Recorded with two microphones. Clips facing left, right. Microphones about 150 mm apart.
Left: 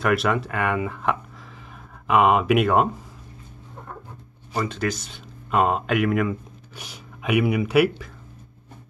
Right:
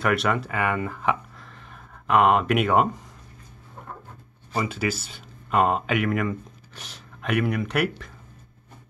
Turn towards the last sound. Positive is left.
turn(degrees=5)  # may be behind; listen again after turning